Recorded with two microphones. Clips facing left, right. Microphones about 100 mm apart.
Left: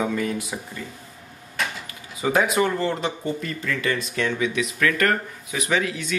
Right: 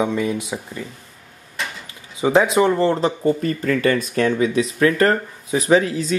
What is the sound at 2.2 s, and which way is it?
Speech, 25° right (ahead or behind).